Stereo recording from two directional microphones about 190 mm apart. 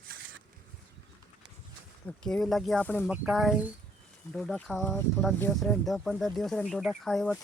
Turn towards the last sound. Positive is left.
turn(degrees=0)  # may be behind; listen again after turning